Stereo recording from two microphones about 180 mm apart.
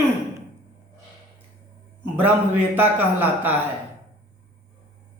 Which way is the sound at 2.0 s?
10° right (ahead or behind).